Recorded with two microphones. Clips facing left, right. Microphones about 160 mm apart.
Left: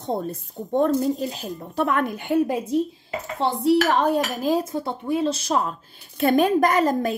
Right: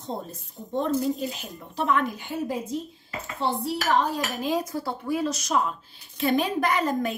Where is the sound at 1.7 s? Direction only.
55° left (ahead or behind).